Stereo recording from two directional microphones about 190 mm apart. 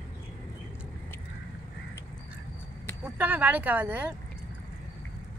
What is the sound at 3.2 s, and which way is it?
Speech, 10° right (ahead or behind).